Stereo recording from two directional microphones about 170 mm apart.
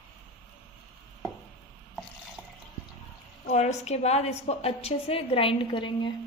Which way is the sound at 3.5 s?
40° left (ahead or behind).